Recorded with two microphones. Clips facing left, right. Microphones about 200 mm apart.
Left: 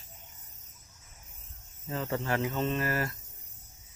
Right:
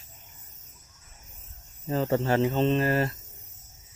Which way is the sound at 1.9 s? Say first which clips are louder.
Right 7 dB; 30° right (ahead or behind).